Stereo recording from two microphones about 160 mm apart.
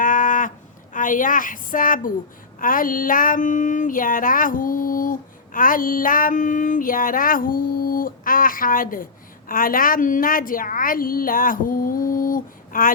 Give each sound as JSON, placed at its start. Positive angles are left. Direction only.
{"t": 0.0, "sound": "a sound", "side_deg": 55}
{"t": 0.9, "sound": "female singing", "side_deg": 55}
{"t": 9.5, "sound": "a woman's voice", "side_deg": 60}